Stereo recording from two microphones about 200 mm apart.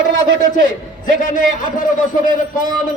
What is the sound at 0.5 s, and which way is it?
A man's voice, 40° left (ahead or behind).